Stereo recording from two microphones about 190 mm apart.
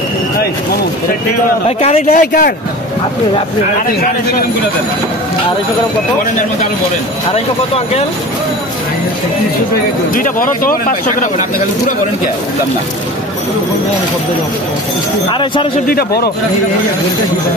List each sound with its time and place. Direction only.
1.8 s speech: 35° left (ahead or behind)
2.0 s speech: 50° left (ahead or behind)
7.2 s speech: 30° left (ahead or behind)
10.1 s speech: 45° left (ahead or behind)
15.9 s speech: 50° left (ahead or behind)